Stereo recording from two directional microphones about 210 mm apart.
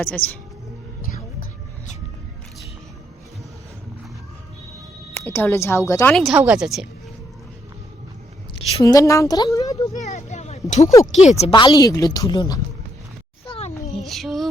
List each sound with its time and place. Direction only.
0.0 s a woman's voice: 10° left (ahead or behind)
5.3 s a woman's voice: 10° left (ahead or behind)
6.1 s speech: 5° right (ahead or behind)
8.8 s a woman's voice: 15° left (ahead or behind)
10.0 s speech: 35° left (ahead or behind); by 12.5 s 20° left (ahead or behind)
13.4 s a sound: 25° left (ahead or behind)
14.0 s music: centre (ahead or behind)